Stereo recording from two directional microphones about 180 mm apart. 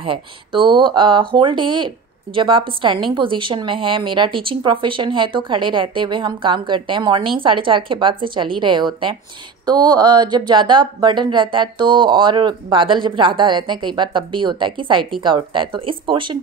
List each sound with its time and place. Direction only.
0.0 s speech: 30° right (ahead or behind)